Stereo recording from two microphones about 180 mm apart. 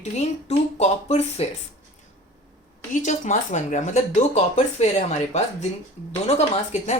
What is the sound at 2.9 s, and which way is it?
Speech, 40° left (ahead or behind).